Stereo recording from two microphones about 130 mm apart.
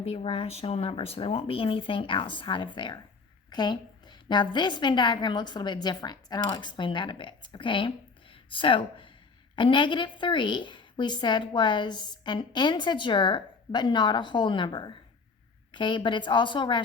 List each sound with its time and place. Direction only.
0.0 s a woman's voice: 50° left (ahead or behind)